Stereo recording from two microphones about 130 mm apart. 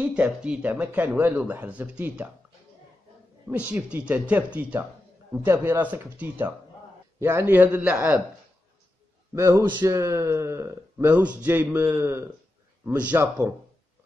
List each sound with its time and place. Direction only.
0.0 s speech: 10° right (ahead or behind)
3.4 s speech: 10° right (ahead or behind)
9.3 s a man's voice: 25° right (ahead or behind)